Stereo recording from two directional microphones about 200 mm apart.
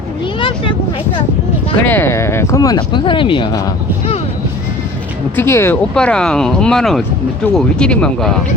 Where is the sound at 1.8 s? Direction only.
10° left (ahead or behind).